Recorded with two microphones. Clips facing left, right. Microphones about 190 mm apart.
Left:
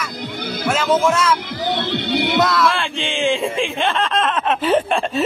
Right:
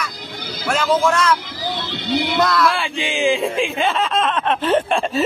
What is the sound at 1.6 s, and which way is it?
Music, 60° left (ahead or behind).